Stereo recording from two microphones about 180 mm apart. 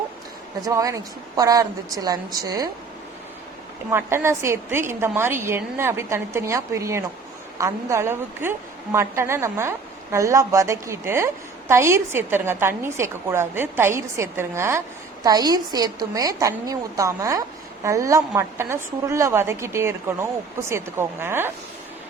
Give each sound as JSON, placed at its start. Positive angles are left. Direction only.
{"t": 0.6, "sound": "a woman's voice", "side_deg": -20}
{"t": 3.9, "sound": "a woman's voice", "side_deg": -15}